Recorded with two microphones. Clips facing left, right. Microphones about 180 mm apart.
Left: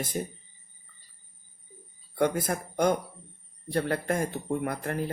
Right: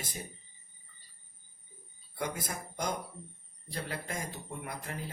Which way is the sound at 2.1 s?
50° left (ahead or behind).